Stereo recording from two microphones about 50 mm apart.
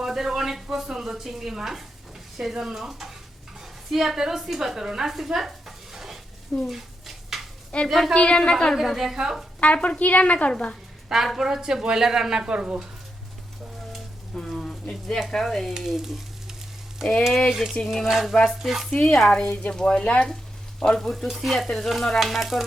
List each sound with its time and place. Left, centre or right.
0.0 s a woman's voice: centre
6.5 s frying: centre
7.7 s a woman's voice: left
8.7 s frying: centre
9.1 s speech: centre
9.6 s a woman's voice: left
11.1 s speech: centre; by 12.8 s right
14.6 s a sound: centre
15.4 s frying: centre
17.0 s speech: centre
17.5 s frying: centre
18.6 s speech: centre
19.1 s speech: centre
21.2 s frying: centre